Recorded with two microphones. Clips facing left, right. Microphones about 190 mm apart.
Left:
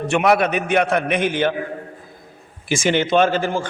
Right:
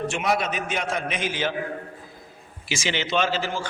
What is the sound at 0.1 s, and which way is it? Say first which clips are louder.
A man's voice: left 8 dB; 65° left (ahead or behind).